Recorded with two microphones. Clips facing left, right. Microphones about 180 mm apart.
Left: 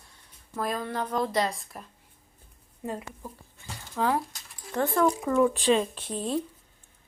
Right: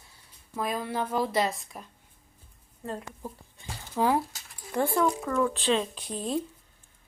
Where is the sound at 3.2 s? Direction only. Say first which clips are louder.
Right 3 dB; 15° right (ahead or behind).